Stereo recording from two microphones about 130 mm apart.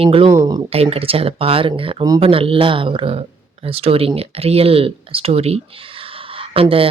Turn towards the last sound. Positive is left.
turn(degrees=-45)  # may be behind; listen again after turning